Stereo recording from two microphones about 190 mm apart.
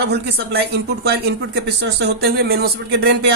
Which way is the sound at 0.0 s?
60° right (ahead or behind).